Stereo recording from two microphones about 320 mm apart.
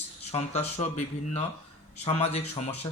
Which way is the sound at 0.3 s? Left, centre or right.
Centre.